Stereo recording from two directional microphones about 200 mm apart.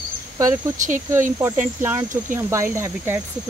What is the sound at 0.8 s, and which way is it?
Speech, 40° right (ahead or behind).